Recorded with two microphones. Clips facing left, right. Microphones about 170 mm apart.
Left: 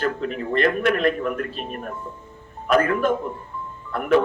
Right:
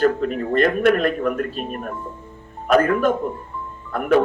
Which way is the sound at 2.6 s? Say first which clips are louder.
Right 3 dB; 45° right (ahead or behind).